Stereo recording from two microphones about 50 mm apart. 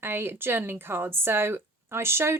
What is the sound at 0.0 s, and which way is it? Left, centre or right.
Speech, right.